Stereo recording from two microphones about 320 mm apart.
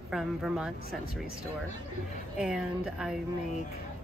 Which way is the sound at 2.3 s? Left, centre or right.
Centre.